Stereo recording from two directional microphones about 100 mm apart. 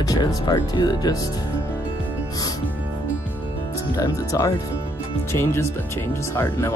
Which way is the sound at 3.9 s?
35° left (ahead or behind).